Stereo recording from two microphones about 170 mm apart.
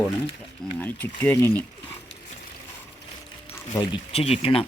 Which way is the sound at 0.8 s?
10° left (ahead or behind).